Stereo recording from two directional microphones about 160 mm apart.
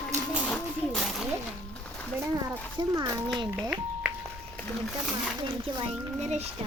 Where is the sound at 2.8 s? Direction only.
30° right (ahead or behind).